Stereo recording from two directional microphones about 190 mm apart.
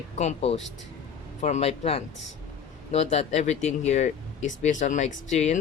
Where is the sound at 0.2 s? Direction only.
35° left (ahead or behind).